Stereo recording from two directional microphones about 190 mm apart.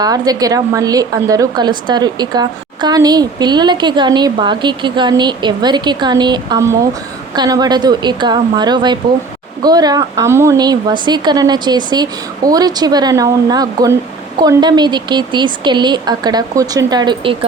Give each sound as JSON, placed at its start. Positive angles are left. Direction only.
{"t": 0.0, "sound": "a woman's voice", "side_deg": -20}